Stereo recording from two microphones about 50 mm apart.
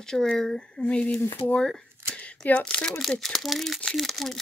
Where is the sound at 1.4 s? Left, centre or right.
Left.